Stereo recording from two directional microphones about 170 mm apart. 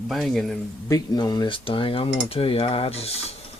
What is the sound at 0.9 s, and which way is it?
Cutlery, 20° left (ahead or behind).